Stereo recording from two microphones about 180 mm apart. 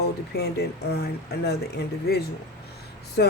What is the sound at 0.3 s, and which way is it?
Speech, 60° left (ahead or behind).